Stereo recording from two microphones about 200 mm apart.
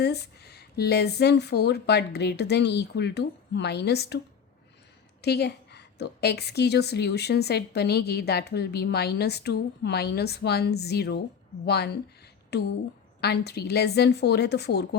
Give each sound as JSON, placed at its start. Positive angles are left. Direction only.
{"t": 0.0, "sound": "a woman's voice", "side_deg": 55}
{"t": 5.2, "sound": "a woman's voice", "side_deg": 55}